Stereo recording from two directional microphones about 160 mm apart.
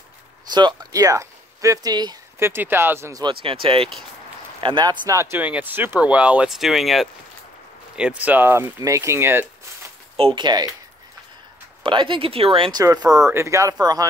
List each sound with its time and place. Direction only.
0.5 s speech: 25° right (ahead or behind)
10.1 s speech: 30° right (ahead or behind)
11.8 s speech: 30° right (ahead or behind)
12.8 s speech: 20° right (ahead or behind)